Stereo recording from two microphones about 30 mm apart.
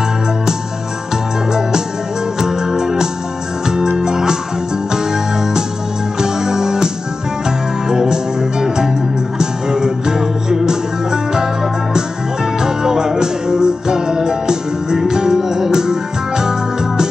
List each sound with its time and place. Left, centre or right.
2.4 s music: centre
7.9 s music: right
12.5 s music: right